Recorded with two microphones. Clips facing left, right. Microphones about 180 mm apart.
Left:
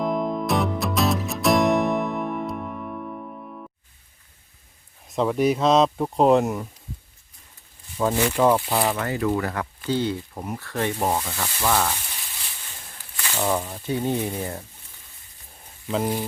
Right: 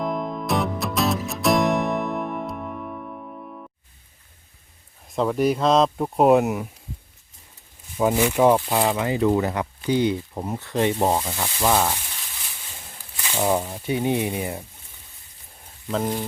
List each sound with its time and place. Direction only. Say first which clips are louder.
0.0 s music: left 2 dB; centre (ahead or behind)
5.0 s speech: even; centre (ahead or behind)
7.9 s speech: right 2 dB; 15° right (ahead or behind)
13.1 s speech: right 2 dB; 10° right (ahead or behind)
15.9 s speech: even; 5° left (ahead or behind)